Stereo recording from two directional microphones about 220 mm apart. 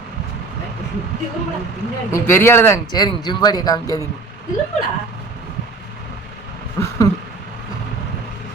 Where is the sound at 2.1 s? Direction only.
10° left (ahead or behind).